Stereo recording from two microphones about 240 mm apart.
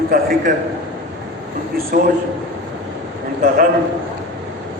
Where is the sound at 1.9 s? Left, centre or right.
Right.